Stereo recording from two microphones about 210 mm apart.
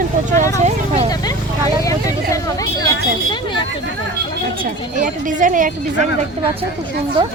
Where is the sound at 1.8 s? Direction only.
15° left (ahead or behind).